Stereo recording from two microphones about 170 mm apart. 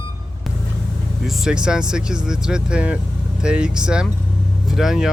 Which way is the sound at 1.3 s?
5° right (ahead or behind).